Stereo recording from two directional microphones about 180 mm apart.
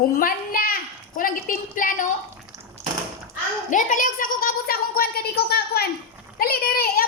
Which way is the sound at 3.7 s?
45° left (ahead or behind).